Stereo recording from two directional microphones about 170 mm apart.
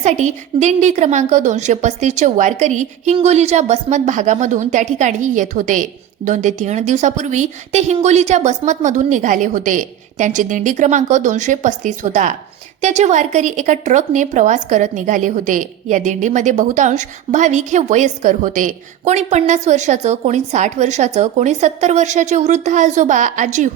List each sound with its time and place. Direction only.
0.0 s a woman's voice: 45° right (ahead or behind)